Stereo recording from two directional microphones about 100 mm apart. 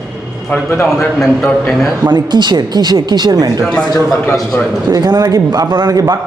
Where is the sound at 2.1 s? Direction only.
45° right (ahead or behind).